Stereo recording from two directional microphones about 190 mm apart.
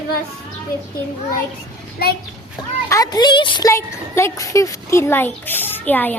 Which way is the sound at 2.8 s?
20° left (ahead or behind).